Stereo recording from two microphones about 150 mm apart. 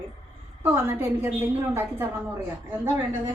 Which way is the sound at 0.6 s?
15° right (ahead or behind).